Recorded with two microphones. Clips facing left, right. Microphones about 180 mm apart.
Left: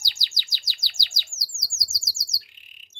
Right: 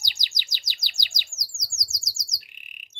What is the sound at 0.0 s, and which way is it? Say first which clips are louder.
Bird: even; 15° right (ahead or behind).